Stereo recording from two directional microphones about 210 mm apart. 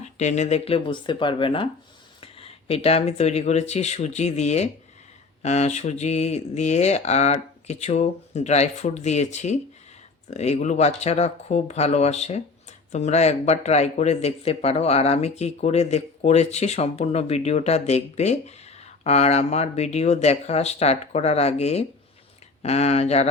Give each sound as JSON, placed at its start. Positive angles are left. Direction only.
{"t": 0.0, "sound": "speech", "side_deg": 35}